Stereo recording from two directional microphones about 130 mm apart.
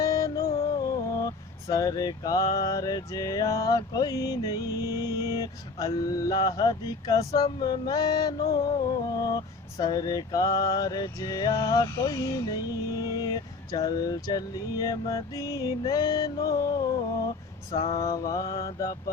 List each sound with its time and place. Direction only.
0.0 s music: 25° left (ahead or behind)
1.7 s male singing: 30° left (ahead or behind)